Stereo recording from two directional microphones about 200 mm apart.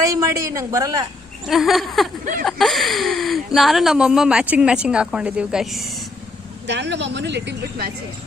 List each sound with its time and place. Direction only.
0.1 s a man's voice: 15° right (ahead or behind)
1.5 s speech: centre (ahead or behind)
6.7 s speech: 60° right (ahead or behind)